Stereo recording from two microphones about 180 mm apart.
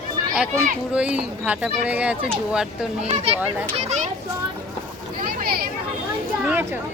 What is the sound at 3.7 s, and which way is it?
Children playing, 35° right (ahead or behind).